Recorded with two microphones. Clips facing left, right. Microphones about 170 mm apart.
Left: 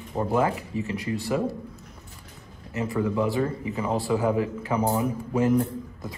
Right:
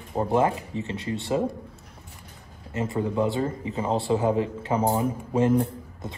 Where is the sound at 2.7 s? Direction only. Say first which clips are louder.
Even; 20° right (ahead or behind).